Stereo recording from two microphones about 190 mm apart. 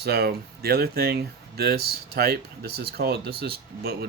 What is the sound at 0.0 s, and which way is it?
Speech, 55° right (ahead or behind).